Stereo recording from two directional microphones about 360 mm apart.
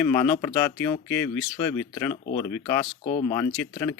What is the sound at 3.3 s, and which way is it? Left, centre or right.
Speech, centre.